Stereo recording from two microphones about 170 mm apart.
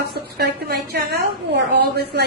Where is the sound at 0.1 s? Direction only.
70° right (ahead or behind).